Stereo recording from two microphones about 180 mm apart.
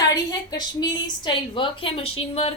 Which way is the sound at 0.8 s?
25° left (ahead or behind).